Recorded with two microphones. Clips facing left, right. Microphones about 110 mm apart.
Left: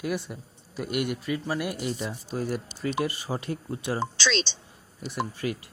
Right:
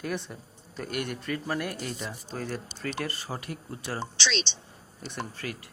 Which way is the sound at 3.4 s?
25° left (ahead or behind).